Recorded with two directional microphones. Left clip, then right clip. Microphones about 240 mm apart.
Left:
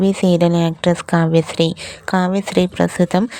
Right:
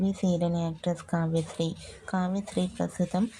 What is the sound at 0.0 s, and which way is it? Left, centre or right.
Speech, left.